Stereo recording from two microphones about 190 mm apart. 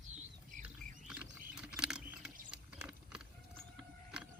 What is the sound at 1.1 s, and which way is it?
Ratchet, 10° right (ahead or behind).